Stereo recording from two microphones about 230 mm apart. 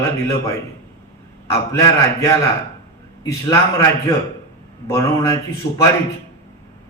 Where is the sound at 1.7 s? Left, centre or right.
Centre.